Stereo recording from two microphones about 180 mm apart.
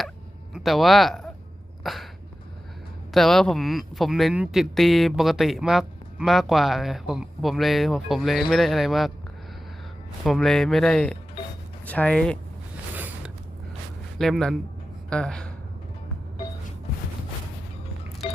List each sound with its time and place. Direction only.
0.5 s speech: centre (ahead or behind)
1.8 s a sound: centre (ahead or behind)
3.1 s speech: centre (ahead or behind)
10.2 s speech: centre (ahead or behind)
13.0 s mechanisms: 10° right (ahead or behind)
14.2 s speech: centre (ahead or behind)